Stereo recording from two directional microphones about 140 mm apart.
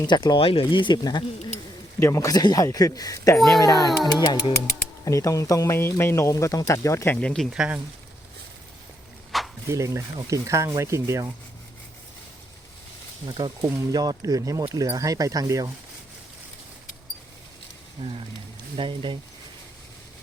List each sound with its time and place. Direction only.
0.0 s speech: 30° left (ahead or behind)
2.0 s speech: 20° left (ahead or behind)
3.3 s speech: centre (ahead or behind)
3.6 s speech: 25° left (ahead or behind)
7.2 s speech: 5° left (ahead or behind)
7.5 s speech: 5° right (ahead or behind)
9.3 s a sound: centre (ahead or behind)
9.6 s speech: 20° right (ahead or behind)
13.2 s speech: 30° right (ahead or behind)
18.8 s speech: 35° right (ahead or behind)